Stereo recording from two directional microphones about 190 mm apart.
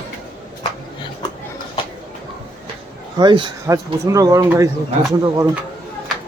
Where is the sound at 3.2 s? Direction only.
20° right (ahead or behind).